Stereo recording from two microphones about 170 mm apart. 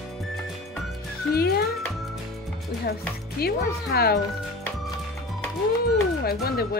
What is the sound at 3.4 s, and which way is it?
Speech, 65° left (ahead or behind).